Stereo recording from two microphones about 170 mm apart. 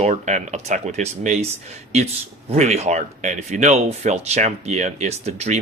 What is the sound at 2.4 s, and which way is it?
Speech, 40° right (ahead or behind).